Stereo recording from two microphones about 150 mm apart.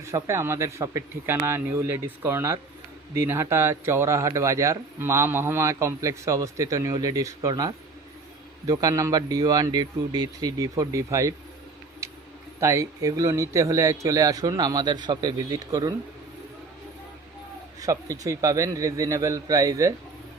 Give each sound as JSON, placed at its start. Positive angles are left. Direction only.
{"t": 0.0, "sound": "speech", "side_deg": -20}
{"t": 12.0, "sound": "a sound", "side_deg": -20}
{"t": 12.5, "sound": "speech", "side_deg": -20}
{"t": 17.7, "sound": "speech", "side_deg": -20}